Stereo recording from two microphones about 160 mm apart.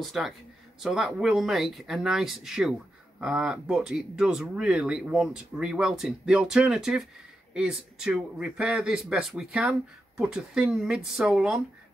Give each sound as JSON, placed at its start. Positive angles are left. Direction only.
{"t": 0.0, "sound": "speech", "side_deg": 0}